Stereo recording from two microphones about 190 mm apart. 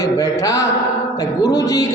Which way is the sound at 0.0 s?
15° left (ahead or behind).